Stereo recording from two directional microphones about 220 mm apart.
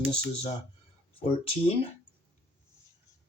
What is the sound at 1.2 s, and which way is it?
Speech, 25° left (ahead or behind).